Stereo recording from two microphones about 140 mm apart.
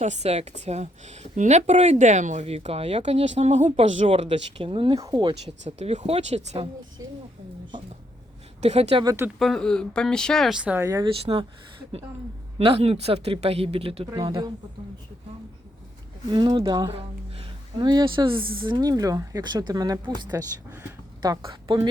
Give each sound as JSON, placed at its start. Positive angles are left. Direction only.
{"t": 0.0, "sound": "speech", "side_deg": -50}
{"t": 4.9, "sound": "speech", "side_deg": -25}
{"t": 5.5, "sound": "speech", "side_deg": -50}
{"t": 7.0, "sound": "a sound", "side_deg": -25}
{"t": 8.6, "sound": "speech", "side_deg": -50}
{"t": 9.0, "sound": "speech", "side_deg": -15}
{"t": 9.4, "sound": "speech", "side_deg": 5}
{"t": 10.8, "sound": "speech", "side_deg": -20}
{"t": 11.2, "sound": "speech", "side_deg": -45}
{"t": 12.5, "sound": "speech", "side_deg": -45}
{"t": 16.3, "sound": "speech", "side_deg": -35}